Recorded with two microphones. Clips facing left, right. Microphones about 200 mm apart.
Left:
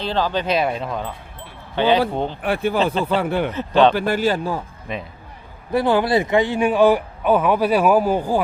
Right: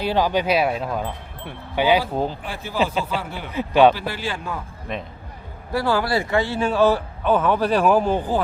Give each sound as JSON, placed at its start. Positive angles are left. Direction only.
{"t": 0.0, "sound": "speech", "side_deg": -10}
{"t": 2.4, "sound": "speech", "side_deg": 60}
{"t": 3.5, "sound": "speech", "side_deg": -10}
{"t": 3.9, "sound": "a man's voice", "side_deg": 50}
{"t": 4.9, "sound": "speech", "side_deg": 0}
{"t": 5.7, "sound": "speech", "side_deg": 20}